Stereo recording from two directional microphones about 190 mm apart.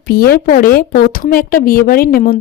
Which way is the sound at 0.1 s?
55° left (ahead or behind).